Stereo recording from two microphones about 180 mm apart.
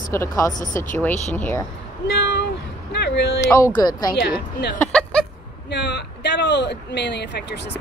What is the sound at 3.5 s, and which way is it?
Speech, 20° left (ahead or behind).